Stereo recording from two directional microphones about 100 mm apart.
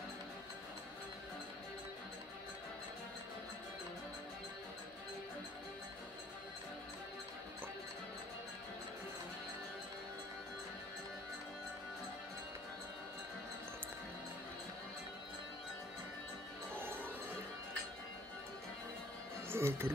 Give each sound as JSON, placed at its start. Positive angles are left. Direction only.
{"t": 16.7, "sound": "music", "side_deg": -20}
{"t": 19.5, "sound": "speech", "side_deg": -25}